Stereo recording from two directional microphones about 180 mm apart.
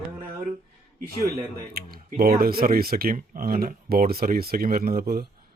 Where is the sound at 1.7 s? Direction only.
55° right (ahead or behind).